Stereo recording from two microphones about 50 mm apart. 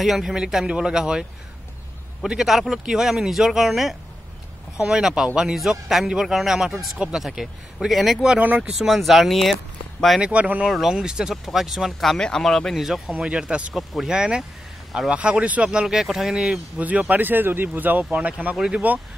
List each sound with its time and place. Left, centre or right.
0.0 s speech: centre
2.2 s speech: centre
8.4 s speech: right
8.7 s speech: centre
10.2 s speech: right
10.7 s speech: centre
11.4 s speech: centre
12.1 s speech: centre
12.7 s speech: centre
13.2 s speech: centre
13.7 s speech: centre
14.1 s speech: centre
16.3 s speech: centre
17.1 s speech: right